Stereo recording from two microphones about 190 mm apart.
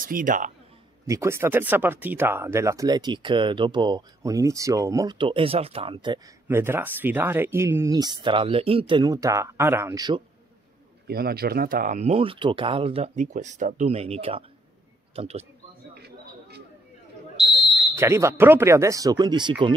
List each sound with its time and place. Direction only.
0.0 s speech: 45° right (ahead or behind)
1.0 s speech: 15° right (ahead or behind)
6.4 s speech: 10° right (ahead or behind)
11.1 s speech: 55° right (ahead or behind); by 15.4 s 35° right (ahead or behind)
15.9 s a sound: 60° right (ahead or behind)
17.9 s speech: 15° right (ahead or behind)